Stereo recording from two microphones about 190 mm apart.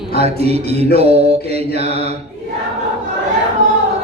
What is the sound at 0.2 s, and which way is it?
A man's voice, 35° right (ahead or behind).